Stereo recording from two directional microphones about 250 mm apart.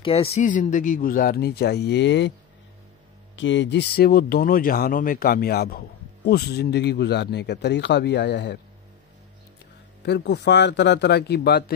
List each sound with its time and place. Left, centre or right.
0.0 s speech: left
3.3 s speech: left
10.0 s speech: left